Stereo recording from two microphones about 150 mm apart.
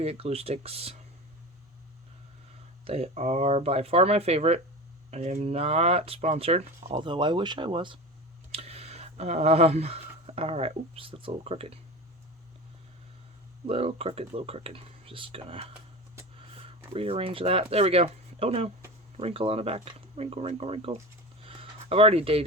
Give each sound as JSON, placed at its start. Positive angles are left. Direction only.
{"t": 0.0, "sound": "speech", "side_deg": -40}
{"t": 2.8, "sound": "speech", "side_deg": -40}
{"t": 7.0, "sound": "speech", "side_deg": -30}
{"t": 13.7, "sound": "speech", "side_deg": -40}
{"t": 21.4, "sound": "a sound", "side_deg": -40}